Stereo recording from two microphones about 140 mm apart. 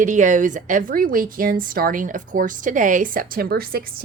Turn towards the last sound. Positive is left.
turn(degrees=-90)